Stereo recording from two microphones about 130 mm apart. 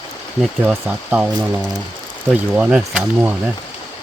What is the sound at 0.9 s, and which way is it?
Speech, 10° right (ahead or behind).